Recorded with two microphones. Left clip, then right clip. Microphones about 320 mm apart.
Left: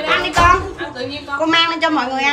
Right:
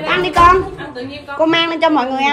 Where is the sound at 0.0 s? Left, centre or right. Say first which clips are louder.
Right 3 dB; centre.